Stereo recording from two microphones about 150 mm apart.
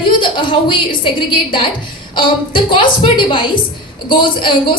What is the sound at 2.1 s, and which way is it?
A woman's voice, 35° left (ahead or behind).